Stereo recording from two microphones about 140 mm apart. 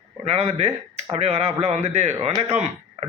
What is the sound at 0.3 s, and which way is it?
A man's voice, 55° right (ahead or behind).